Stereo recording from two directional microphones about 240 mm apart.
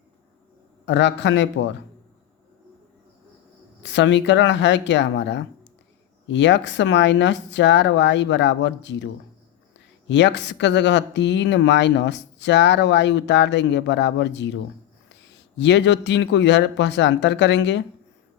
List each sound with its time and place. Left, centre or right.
0.9 s speech: left
3.8 s speech: left
10.1 s speech: left